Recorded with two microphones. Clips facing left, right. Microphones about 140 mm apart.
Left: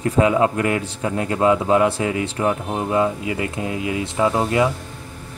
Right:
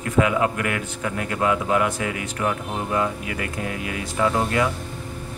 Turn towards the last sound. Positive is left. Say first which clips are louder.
# left 3 dB
turn(degrees=20)  # may be behind; listen again after turning